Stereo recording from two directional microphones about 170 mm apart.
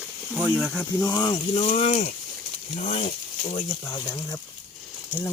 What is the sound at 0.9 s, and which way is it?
Speech, 20° left (ahead or behind).